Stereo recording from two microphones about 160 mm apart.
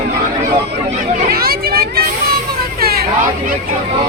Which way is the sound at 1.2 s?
70° right (ahead or behind).